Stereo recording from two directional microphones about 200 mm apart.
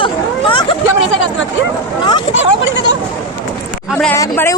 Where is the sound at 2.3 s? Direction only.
60° left (ahead or behind).